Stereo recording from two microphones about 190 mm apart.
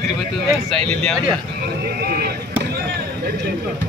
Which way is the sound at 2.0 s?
55° right (ahead or behind).